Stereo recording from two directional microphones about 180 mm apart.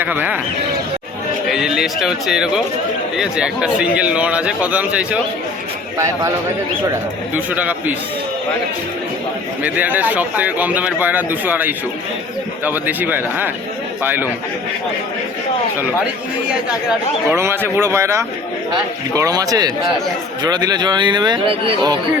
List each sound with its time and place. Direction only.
0.0 s speech: 10° right (ahead or behind)
1.5 s speech: centre (ahead or behind)
7.3 s speech: 10° right (ahead or behind)
9.6 s speech: 10° right (ahead or behind)
17.2 s a man's voice: 15° right (ahead or behind)